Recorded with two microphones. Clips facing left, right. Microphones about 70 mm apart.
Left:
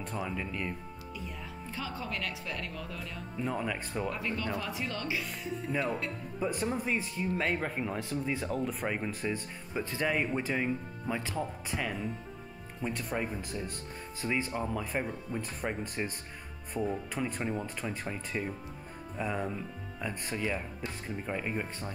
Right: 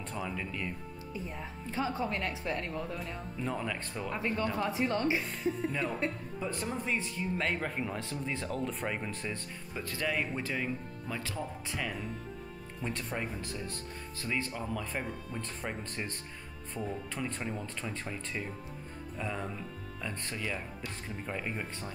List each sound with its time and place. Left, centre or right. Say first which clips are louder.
0.0 s speech: left 1 dB; centre
1.1 s speech: right 2 dB; right
3.3 s speech: left 2 dB; centre
4.1 s speech: right 2 dB; right
5.7 s speech: left 1 dB; centre
11.3 s speech: left 3 dB; centre
20.4 s speech: left 3 dB; left
21.3 s speech: left 3 dB; centre